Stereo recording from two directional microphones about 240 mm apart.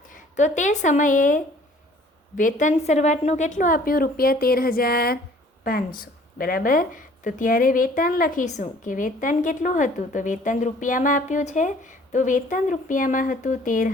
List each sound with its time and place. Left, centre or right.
0.1 s a woman's voice: left